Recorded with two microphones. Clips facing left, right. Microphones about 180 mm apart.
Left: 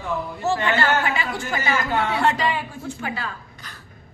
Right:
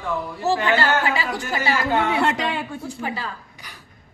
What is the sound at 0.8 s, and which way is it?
Speech, 35° right (ahead or behind).